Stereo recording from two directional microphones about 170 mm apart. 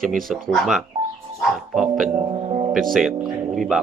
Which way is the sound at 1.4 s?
Centre (ahead or behind).